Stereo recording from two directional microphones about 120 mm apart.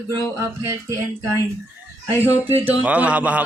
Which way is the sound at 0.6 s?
25° right (ahead or behind).